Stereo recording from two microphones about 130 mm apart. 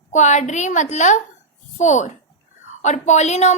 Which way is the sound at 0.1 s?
65° left (ahead or behind).